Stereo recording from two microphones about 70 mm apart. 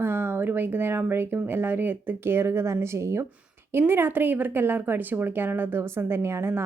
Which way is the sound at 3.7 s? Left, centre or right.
Right.